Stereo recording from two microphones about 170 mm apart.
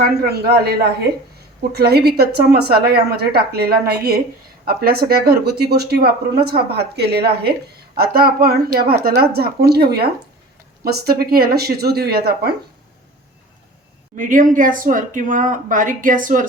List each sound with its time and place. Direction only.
0.0 s speech: 60° right (ahead or behind)
14.2 s speech: 50° right (ahead or behind)